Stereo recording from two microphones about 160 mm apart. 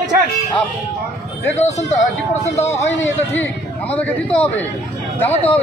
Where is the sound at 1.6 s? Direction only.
45° left (ahead or behind).